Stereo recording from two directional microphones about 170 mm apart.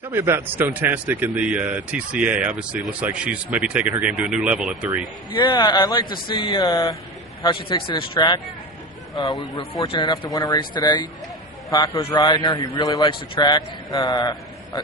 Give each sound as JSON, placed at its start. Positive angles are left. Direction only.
{"t": 0.1, "sound": "speech", "side_deg": -10}
{"t": 5.3, "sound": "a man's voice", "side_deg": 25}
{"t": 9.8, "sound": "a man's voice", "side_deg": 25}